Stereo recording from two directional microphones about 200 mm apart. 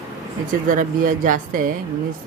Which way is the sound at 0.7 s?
40° right (ahead or behind).